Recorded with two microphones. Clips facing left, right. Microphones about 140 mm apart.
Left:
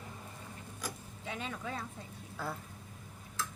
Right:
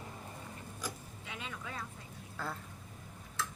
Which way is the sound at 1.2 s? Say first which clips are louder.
Left 5 dB; 35° left (ahead or behind).